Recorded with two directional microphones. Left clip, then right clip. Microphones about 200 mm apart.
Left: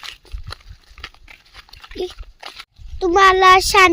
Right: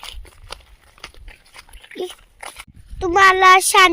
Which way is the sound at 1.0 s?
15° right (ahead or behind).